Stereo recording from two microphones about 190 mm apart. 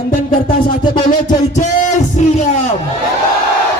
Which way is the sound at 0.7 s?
45° left (ahead or behind).